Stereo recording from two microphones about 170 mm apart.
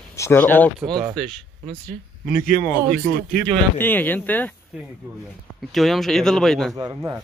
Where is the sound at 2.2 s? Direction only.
50° left (ahead or behind).